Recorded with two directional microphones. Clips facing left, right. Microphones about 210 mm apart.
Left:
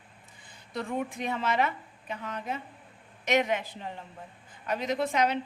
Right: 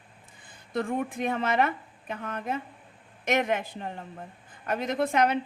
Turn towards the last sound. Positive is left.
turn(degrees=-55)  # may be behind; listen again after turning